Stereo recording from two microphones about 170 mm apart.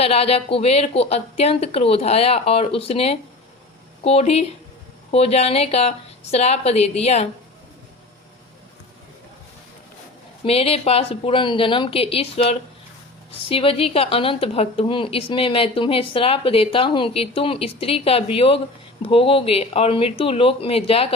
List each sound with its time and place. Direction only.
0.0 s a woman's voice: 35° left (ahead or behind)
10.4 s a woman's voice: 35° left (ahead or behind)